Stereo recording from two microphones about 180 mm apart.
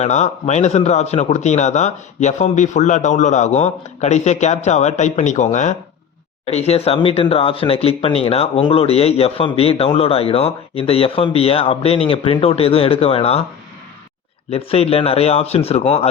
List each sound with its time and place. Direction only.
0.0 s speech: 40° left (ahead or behind)
14.5 s speech: 35° left (ahead or behind)